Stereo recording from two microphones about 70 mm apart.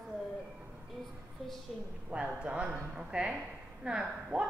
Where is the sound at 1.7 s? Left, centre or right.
Centre.